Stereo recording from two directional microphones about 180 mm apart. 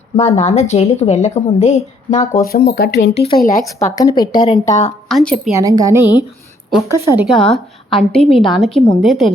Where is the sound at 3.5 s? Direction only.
20° left (ahead or behind).